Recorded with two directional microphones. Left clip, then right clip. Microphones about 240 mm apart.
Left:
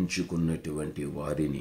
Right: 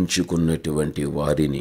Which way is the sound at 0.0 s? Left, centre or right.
Right.